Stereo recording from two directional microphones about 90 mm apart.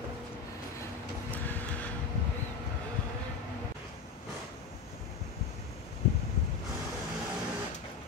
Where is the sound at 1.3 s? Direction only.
20° left (ahead or behind).